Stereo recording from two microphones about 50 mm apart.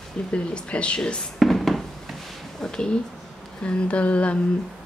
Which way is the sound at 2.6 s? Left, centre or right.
Centre.